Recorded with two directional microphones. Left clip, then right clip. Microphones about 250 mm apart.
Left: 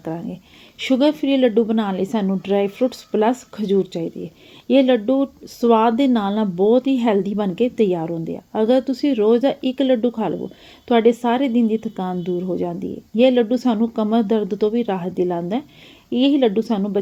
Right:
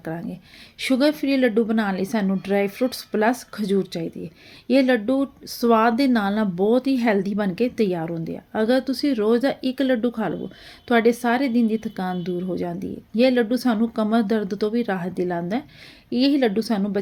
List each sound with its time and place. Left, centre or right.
0.0 s speech: centre